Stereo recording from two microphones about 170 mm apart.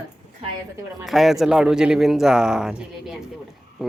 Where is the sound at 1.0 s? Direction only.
Centre (ahead or behind).